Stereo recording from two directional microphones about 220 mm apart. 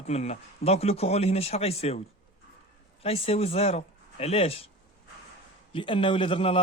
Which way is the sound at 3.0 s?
25° left (ahead or behind).